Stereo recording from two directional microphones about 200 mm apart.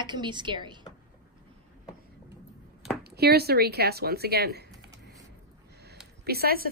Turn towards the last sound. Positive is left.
turn(degrees=-50)  # may be behind; listen again after turning